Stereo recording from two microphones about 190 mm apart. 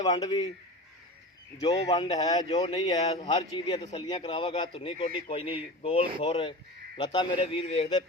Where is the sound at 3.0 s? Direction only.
35° left (ahead or behind).